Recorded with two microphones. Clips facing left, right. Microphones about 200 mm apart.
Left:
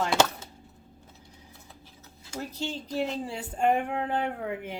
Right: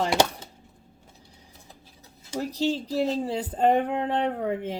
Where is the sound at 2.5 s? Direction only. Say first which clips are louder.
Right 9 dB; 35° right (ahead or behind).